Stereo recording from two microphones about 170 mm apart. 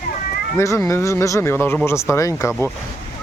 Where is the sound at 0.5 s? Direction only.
15° left (ahead or behind).